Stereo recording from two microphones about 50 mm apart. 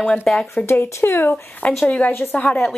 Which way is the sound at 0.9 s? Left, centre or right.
Left.